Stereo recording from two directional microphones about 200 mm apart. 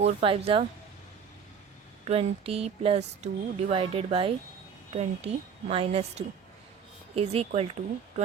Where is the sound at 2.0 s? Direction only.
30° right (ahead or behind).